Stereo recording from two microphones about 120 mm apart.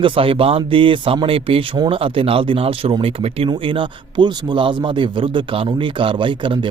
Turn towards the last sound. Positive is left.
turn(degrees=-45)  # may be behind; listen again after turning